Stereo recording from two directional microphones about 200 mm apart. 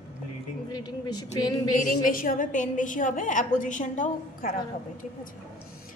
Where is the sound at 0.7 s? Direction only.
20° left (ahead or behind).